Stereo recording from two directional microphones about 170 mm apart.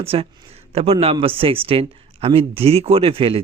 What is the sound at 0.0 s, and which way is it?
Speech, 35° right (ahead or behind).